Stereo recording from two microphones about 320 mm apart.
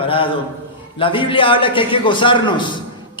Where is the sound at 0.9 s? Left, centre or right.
Centre.